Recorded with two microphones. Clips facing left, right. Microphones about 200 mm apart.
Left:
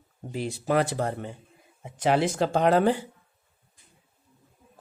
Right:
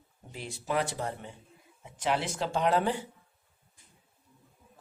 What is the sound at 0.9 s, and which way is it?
Speech, 55° left (ahead or behind).